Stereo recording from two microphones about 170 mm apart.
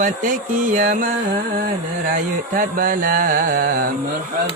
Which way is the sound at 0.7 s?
55° right (ahead or behind).